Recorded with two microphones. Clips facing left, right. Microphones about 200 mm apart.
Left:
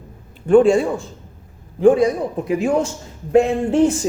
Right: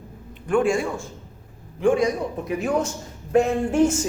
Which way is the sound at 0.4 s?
35° left (ahead or behind).